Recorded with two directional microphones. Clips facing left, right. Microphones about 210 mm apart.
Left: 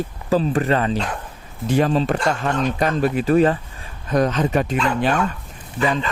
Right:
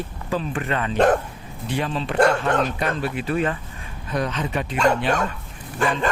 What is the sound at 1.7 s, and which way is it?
Speech, 40° left (ahead or behind).